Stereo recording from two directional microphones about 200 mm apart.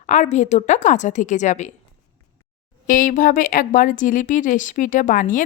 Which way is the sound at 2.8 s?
40° left (ahead or behind).